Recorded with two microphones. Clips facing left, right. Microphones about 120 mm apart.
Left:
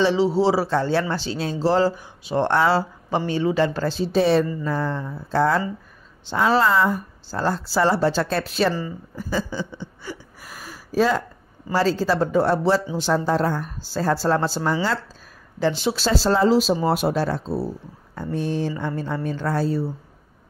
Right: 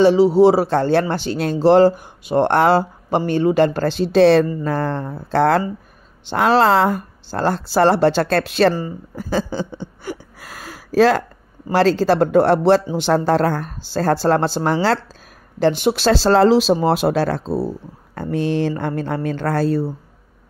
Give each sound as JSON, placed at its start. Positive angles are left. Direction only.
{"t": 0.0, "sound": "a man's voice", "side_deg": -45}
{"t": 4.6, "sound": "speech", "side_deg": -65}
{"t": 9.1, "sound": "a sound", "side_deg": -90}
{"t": 9.4, "sound": "a sound", "side_deg": -30}
{"t": 10.0, "sound": "gasp", "side_deg": -90}
{"t": 11.7, "sound": "speech", "side_deg": -70}
{"t": 15.6, "sound": "speech", "side_deg": -60}